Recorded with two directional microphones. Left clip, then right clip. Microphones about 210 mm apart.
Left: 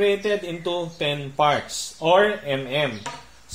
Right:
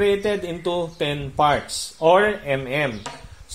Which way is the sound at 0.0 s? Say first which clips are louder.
Right 1 dB; 50° right (ahead or behind).